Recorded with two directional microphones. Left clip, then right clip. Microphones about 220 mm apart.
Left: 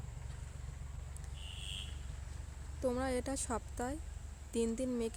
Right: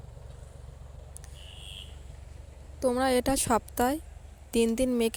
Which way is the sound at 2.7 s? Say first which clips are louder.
Right 11 dB; 30° right (ahead or behind).